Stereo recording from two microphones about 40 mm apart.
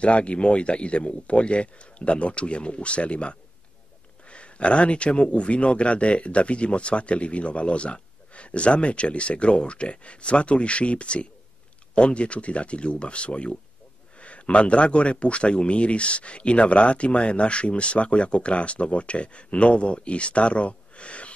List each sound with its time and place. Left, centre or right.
0.0 s speech: left